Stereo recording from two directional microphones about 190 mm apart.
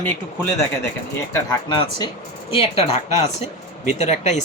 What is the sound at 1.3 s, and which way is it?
Speech, 20° left (ahead or behind).